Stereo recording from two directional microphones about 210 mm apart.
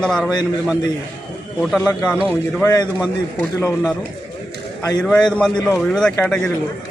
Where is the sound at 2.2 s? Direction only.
10° left (ahead or behind).